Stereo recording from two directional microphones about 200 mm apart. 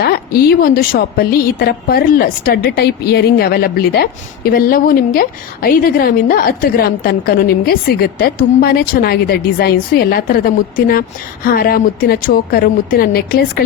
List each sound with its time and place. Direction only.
0.0 s a woman's voice: 50° left (ahead or behind)